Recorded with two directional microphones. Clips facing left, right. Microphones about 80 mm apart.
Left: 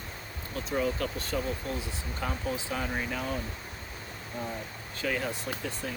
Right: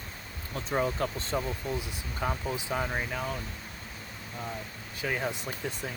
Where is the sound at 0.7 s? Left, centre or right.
Right.